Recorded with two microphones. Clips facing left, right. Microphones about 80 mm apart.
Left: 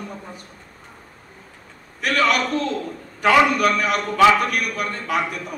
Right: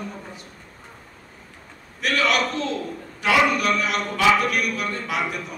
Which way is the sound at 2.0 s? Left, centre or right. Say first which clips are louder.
Left 2 dB; left.